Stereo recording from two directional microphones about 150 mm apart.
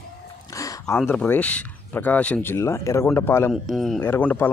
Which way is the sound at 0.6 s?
20° left (ahead or behind).